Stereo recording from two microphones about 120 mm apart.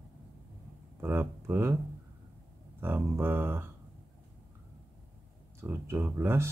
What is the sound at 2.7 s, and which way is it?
Speech, 20° right (ahead or behind).